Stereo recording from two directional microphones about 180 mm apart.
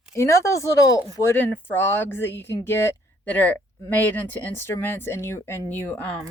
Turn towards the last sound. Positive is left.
turn(degrees=10)  # may be behind; listen again after turning